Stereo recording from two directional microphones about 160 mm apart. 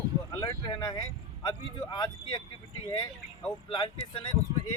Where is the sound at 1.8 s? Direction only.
25° left (ahead or behind).